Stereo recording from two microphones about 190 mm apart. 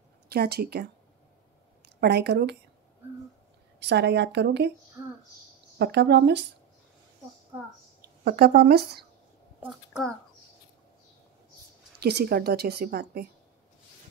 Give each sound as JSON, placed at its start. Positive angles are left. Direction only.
{"t": 0.3, "sound": "a woman's voice", "side_deg": -55}
{"t": 2.0, "sound": "a woman's voice", "side_deg": -60}
{"t": 3.8, "sound": "a woman's voice", "side_deg": -65}
{"t": 5.0, "sound": "speech", "side_deg": -20}
{"t": 5.8, "sound": "a woman's voice", "side_deg": -65}
{"t": 8.0, "sound": "speech", "side_deg": -50}
{"t": 9.6, "sound": "a child's voice", "side_deg": 0}
{"t": 12.0, "sound": "a woman's voice", "side_deg": -60}